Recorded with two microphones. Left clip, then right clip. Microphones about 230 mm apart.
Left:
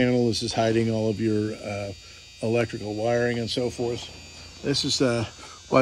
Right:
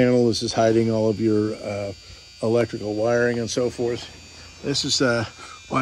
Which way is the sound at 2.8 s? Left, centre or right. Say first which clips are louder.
Right 4 dB; centre.